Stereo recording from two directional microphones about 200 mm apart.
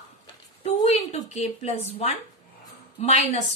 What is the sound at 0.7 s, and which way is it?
A woman's voice, 30° left (ahead or behind).